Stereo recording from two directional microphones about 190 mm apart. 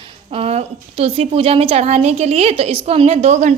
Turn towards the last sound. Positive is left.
turn(degrees=-35)  # may be behind; listen again after turning